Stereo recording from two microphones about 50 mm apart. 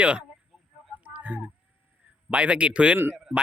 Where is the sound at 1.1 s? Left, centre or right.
Right.